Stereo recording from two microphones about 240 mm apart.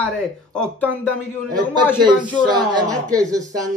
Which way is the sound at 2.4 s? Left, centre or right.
Centre.